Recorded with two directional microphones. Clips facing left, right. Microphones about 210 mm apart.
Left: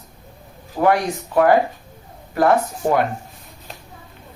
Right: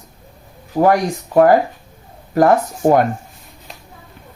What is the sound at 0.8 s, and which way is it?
Speech, 40° right (ahead or behind).